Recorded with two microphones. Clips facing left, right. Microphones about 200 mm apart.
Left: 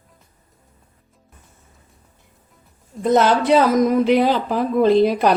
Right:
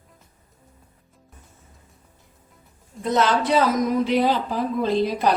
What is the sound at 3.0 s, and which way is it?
Speech, 55° left (ahead or behind).